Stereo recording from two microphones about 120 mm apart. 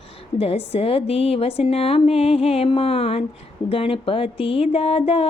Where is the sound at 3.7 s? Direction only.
50° left (ahead or behind).